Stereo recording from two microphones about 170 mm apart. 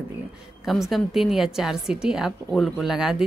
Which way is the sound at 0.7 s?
Centre (ahead or behind).